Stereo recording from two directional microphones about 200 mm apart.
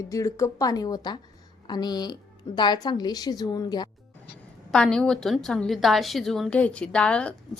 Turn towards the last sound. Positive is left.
turn(degrees=5)  # may be behind; listen again after turning